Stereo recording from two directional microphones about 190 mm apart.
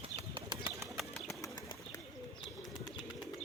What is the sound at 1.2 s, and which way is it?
Bird, 20° left (ahead or behind).